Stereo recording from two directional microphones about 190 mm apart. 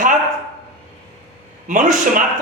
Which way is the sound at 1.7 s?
45° right (ahead or behind).